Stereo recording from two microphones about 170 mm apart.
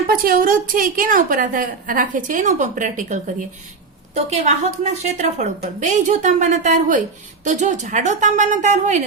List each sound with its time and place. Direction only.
0.1 s a woman's voice: 60° right (ahead or behind)